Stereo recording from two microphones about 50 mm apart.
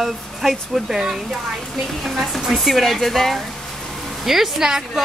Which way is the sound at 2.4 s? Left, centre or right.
Centre.